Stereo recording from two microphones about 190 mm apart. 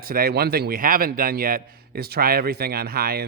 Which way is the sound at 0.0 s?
50° right (ahead or behind).